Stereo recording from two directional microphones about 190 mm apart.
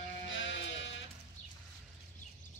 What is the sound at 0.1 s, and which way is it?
Music, 80° left.